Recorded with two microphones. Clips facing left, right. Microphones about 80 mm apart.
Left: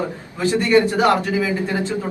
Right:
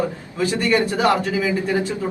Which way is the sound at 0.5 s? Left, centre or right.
Left.